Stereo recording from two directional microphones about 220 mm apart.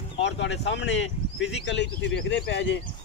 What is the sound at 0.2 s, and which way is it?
Speech, 55° left (ahead or behind).